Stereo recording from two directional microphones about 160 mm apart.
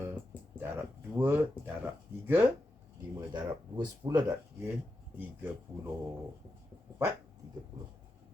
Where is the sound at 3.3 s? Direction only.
25° right (ahead or behind).